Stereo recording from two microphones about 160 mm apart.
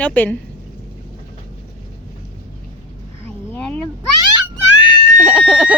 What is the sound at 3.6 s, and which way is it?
Cat, 10° left (ahead or behind).